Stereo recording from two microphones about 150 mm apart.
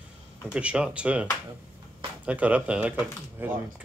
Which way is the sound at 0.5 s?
5° right (ahead or behind).